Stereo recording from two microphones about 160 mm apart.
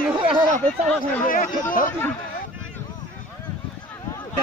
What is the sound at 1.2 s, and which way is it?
Speech, 60° left (ahead or behind).